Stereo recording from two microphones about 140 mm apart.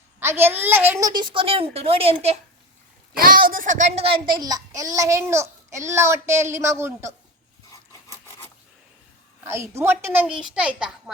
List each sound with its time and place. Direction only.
0.2 s a woman's voice: 15° right (ahead or behind); by 2.4 s 45° right (ahead or behind)
3.2 s a child's voice: 90° right; by 4.2 s 45° right (ahead or behind)
4.4 s a child's voice: 25° right (ahead or behind)
9.4 s a woman's voice: 20° right (ahead or behind)